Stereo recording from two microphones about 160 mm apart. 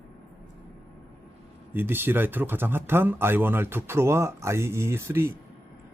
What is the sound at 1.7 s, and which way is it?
Speech, 15° right (ahead or behind).